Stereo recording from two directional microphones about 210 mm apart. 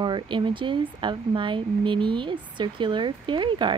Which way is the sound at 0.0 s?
20° right (ahead or behind).